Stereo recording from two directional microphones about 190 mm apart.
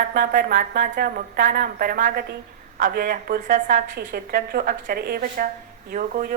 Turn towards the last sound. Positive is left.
turn(degrees=-45)  # may be behind; listen again after turning